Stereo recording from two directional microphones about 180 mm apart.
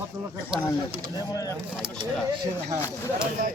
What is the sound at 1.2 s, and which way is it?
Speech, 20° left (ahead or behind).